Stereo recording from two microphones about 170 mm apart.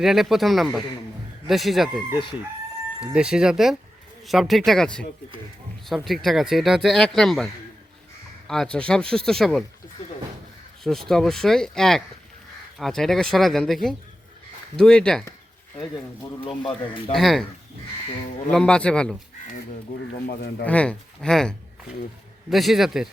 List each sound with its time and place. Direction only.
0.0 s a man's voice: centre (ahead or behind)
6.1 s a man's voice: centre (ahead or behind)
10.8 s a man's voice: centre (ahead or behind)
16.6 s speech: 30° left (ahead or behind)
17.2 s a man's voice: centre (ahead or behind)
18.5 s a man's voice: 5° left (ahead or behind)
19.9 s speech: 55° left (ahead or behind)
20.2 s speech: 70° left (ahead or behind)
20.7 s a man's voice: 5° left (ahead or behind)